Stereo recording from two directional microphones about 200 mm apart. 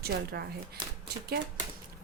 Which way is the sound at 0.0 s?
50° right (ahead or behind).